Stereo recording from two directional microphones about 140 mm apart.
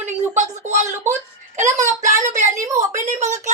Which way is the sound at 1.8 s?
60° right (ahead or behind).